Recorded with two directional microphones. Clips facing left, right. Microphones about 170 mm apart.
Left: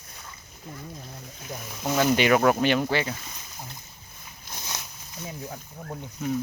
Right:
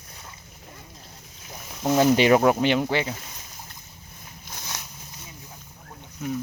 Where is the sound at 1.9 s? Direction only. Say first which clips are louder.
Right 3 dB; 30° right (ahead or behind).